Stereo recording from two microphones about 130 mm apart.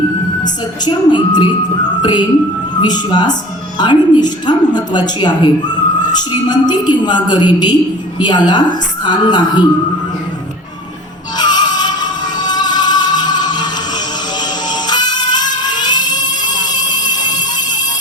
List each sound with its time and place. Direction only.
0.4 s speech: 35° left (ahead or behind)
11.3 s music: 35° left (ahead or behind)
14.7 s music: 35° left (ahead or behind)